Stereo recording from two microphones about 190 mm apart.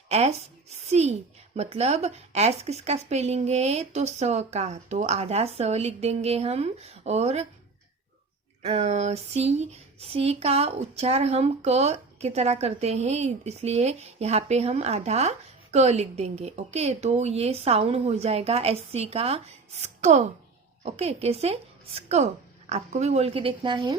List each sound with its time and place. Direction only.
0.1 s a woman's voice: 35° right (ahead or behind)
8.6 s a woman's voice: 35° right (ahead or behind)